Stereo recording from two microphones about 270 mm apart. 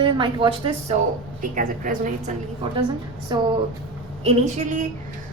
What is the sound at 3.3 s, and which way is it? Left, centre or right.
Speech, centre.